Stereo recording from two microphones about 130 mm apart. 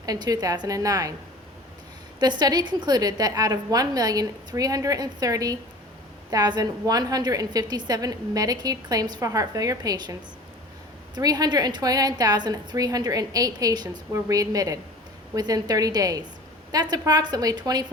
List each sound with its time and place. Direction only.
0.0 s a woman's voice: 30° right (ahead or behind)
2.1 s a woman's voice: 35° right (ahead or behind)